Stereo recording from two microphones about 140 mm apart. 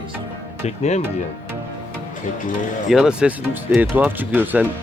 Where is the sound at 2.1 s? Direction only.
70° left (ahead or behind).